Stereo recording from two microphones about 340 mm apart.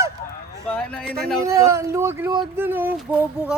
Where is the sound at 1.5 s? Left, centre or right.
Centre.